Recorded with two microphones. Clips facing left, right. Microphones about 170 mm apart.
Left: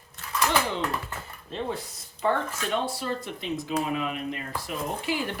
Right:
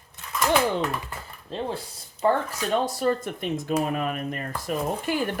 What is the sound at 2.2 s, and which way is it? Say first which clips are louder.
Speech: right 3 dB; 40° right (ahead or behind).